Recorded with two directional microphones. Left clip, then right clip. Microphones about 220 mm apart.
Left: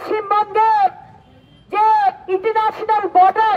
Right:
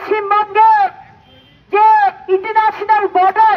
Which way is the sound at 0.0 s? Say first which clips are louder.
Right 3 dB; 60° left (ahead or behind).